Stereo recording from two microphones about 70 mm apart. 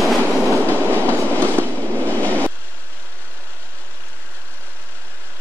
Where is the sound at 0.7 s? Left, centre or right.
Right.